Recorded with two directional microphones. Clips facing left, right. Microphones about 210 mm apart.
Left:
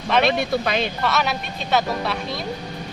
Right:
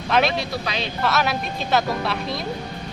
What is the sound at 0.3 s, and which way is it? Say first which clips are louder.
Speech: left 5 dB; 55° left (ahead or behind).